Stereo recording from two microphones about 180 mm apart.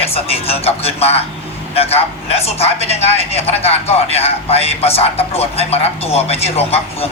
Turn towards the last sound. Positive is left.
turn(degrees=35)  # may be behind; listen again after turning